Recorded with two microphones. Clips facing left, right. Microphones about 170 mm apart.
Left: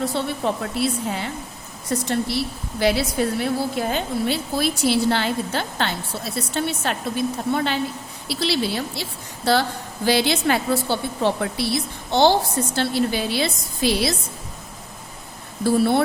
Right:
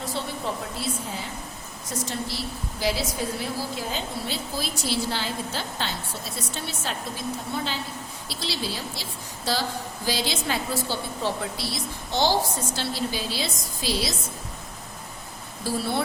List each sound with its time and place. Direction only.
0.0 s a woman's voice: 65° left (ahead or behind)